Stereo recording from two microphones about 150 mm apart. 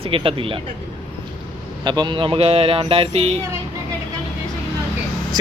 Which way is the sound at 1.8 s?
30° right (ahead or behind).